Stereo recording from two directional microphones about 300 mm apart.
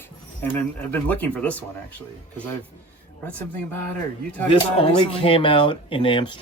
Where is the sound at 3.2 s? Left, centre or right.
Centre.